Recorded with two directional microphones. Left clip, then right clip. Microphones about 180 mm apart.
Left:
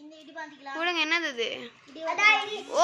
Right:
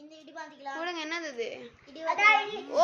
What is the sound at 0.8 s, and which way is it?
Speech, 10° left (ahead or behind).